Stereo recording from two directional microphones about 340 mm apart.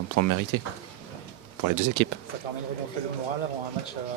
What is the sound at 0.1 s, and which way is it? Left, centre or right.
Speech, right.